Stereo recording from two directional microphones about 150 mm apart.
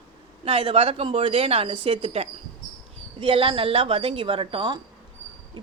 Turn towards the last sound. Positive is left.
turn(degrees=-35)  # may be behind; listen again after turning